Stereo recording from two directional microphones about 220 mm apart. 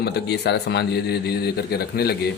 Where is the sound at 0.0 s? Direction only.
50° left (ahead or behind).